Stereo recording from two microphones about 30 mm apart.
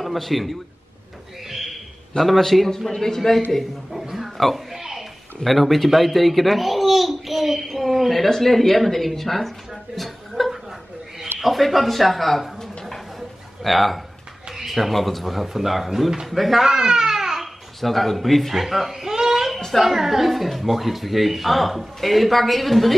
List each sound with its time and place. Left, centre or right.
0.0 s a man's voice: centre
1.5 s a sound: centre
2.2 s a man's voice: centre
4.7 s a sound: centre
5.4 s a man's voice: centre
5.9 s babbling: centre
8.3 s a man's voice: centre
9.9 s a sound: centre
11.3 s a man's voice: centre
16.3 s a man's voice: centre
16.6 s babbling: centre
17.7 s a man's voice: centre